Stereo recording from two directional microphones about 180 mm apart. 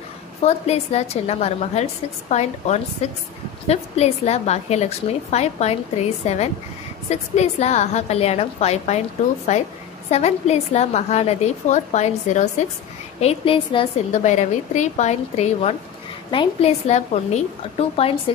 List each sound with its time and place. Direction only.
0.4 s a woman's voice: 35° left (ahead or behind)
10.1 s a woman's voice: 35° left (ahead or behind)
14.1 s a woman's voice: 40° left (ahead or behind)